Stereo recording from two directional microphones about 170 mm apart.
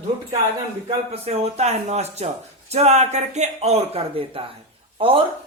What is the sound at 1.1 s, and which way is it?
Speech, 35° right (ahead or behind).